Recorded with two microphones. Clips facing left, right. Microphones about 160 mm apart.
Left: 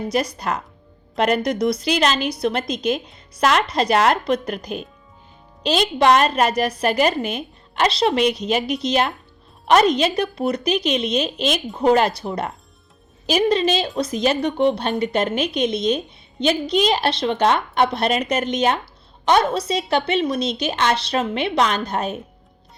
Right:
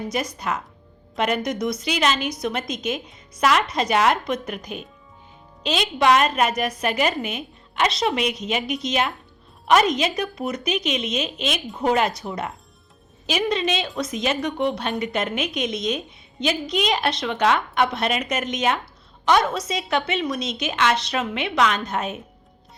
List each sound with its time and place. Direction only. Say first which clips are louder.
0.1 s a woman's voice: left 5 dB; 35° left (ahead or behind)